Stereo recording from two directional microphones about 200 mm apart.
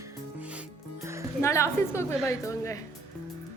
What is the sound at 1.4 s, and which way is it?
A woman's voice, 15° left (ahead or behind).